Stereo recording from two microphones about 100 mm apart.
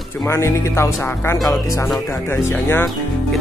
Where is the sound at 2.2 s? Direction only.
20° left (ahead or behind).